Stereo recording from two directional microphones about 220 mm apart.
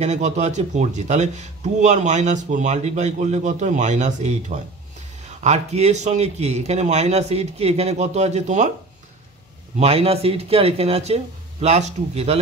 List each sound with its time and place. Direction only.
0.0 s speech: 30° right (ahead or behind)
5.4 s speech: 30° right (ahead or behind)
9.8 s speech: 25° right (ahead or behind)